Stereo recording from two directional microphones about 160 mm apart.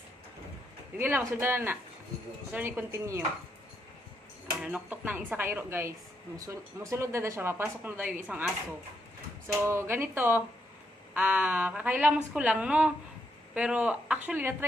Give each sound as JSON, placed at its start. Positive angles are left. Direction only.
{"t": 0.9, "sound": "speech", "side_deg": -15}
{"t": 4.6, "sound": "speech", "side_deg": -10}
{"t": 9.5, "sound": "speech", "side_deg": -15}